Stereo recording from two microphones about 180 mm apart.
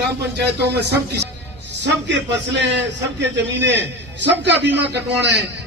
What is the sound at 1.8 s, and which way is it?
A man's voice, 75° right (ahead or behind).